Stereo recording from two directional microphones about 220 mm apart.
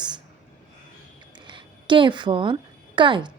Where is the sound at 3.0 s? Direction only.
20° right (ahead or behind).